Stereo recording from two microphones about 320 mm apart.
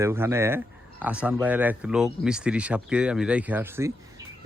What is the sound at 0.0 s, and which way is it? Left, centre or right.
Speech, centre.